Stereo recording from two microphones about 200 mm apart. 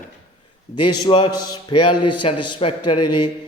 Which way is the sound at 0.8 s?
20° left (ahead or behind).